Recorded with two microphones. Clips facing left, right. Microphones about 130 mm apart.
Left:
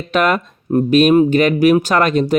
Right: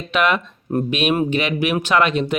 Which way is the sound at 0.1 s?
40° left (ahead or behind).